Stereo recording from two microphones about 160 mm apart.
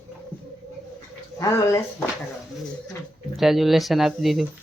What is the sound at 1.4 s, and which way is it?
Speech, 20° left (ahead or behind).